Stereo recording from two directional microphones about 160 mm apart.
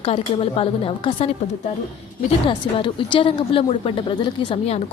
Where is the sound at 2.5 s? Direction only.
30° left (ahead or behind).